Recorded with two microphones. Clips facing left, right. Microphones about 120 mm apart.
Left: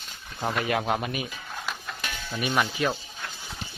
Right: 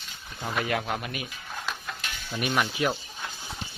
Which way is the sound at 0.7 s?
25° left (ahead or behind).